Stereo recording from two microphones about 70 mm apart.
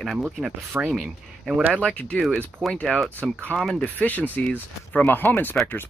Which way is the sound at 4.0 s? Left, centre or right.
Left.